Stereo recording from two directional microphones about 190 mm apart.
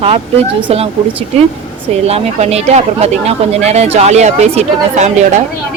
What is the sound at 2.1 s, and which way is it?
Speech, 35° right (ahead or behind).